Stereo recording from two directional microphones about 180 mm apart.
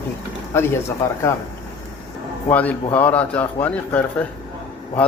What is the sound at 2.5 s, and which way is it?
Speech, 10° left (ahead or behind).